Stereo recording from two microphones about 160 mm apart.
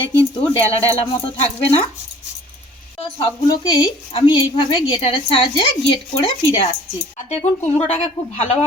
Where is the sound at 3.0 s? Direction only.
30° left (ahead or behind).